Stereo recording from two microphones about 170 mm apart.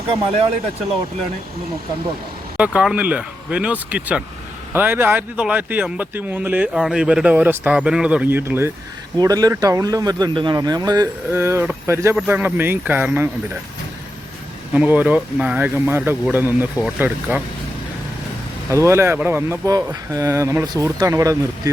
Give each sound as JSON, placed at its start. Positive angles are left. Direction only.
{"t": 2.6, "sound": "speech", "side_deg": -5}
{"t": 14.7, "sound": "speech", "side_deg": -10}
{"t": 18.7, "sound": "speech", "side_deg": -15}